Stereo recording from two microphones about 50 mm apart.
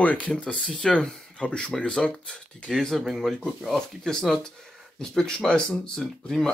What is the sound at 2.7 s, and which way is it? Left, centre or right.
Speech, centre.